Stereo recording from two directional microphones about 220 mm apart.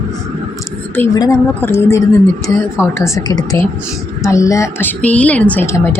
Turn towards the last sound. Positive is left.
turn(degrees=10)  # may be behind; listen again after turning